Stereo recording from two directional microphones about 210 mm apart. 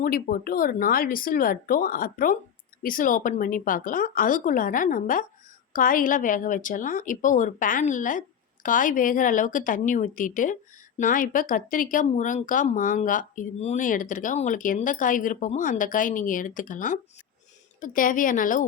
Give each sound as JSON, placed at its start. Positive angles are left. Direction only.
{"t": 0.0, "sound": "speech", "side_deg": 45}